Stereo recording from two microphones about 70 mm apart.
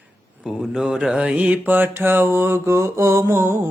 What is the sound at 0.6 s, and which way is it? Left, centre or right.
Mantra, centre.